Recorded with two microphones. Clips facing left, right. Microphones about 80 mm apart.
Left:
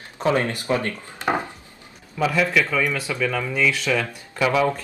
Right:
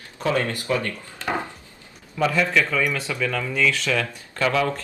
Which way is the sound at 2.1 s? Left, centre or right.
Centre.